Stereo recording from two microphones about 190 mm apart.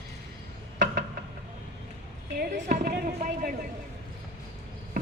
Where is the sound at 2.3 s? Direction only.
45° right (ahead or behind).